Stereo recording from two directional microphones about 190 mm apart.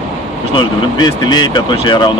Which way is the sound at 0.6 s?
25° left (ahead or behind).